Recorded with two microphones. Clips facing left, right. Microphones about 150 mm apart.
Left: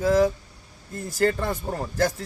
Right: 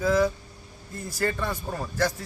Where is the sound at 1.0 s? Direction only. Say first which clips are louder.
Left 5 dB; 45° left (ahead or behind).